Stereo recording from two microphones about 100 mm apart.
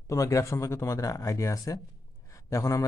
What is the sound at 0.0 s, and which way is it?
Speech, 35° left (ahead or behind).